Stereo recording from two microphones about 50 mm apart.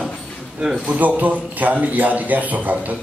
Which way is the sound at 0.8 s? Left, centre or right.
Right.